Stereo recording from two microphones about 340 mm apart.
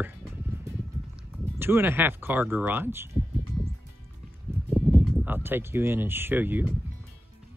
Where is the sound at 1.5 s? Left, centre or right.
Centre.